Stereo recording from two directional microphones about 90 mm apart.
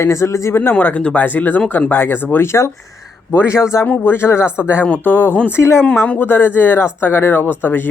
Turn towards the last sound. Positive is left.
turn(degrees=25)  # may be behind; listen again after turning